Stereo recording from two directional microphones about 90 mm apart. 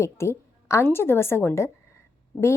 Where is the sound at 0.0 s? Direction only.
30° left (ahead or behind).